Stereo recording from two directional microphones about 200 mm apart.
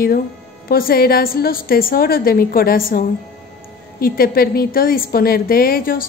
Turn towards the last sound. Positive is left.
turn(degrees=45)  # may be behind; listen again after turning